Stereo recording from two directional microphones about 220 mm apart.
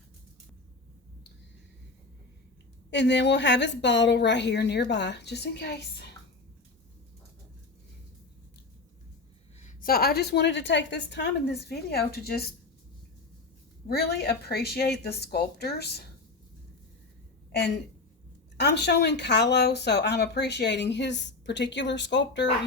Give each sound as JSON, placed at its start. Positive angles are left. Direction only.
{"t": 2.9, "sound": "speech", "side_deg": 50}
{"t": 9.6, "sound": "speech", "side_deg": 40}
{"t": 13.8, "sound": "speech", "side_deg": 45}
{"t": 18.5, "sound": "speech", "side_deg": 50}